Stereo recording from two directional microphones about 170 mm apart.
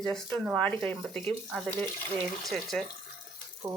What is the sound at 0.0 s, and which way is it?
Speech, 5° left (ahead or behind).